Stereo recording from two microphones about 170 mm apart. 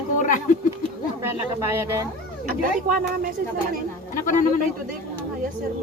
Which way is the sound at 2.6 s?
55° right (ahead or behind).